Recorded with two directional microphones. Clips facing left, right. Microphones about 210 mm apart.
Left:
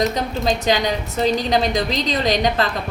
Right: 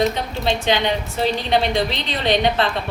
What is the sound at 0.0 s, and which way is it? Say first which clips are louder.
A woman's voice: even; 40° left (ahead or behind).